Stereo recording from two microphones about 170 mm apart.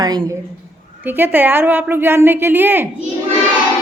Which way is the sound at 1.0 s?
10° right (ahead or behind).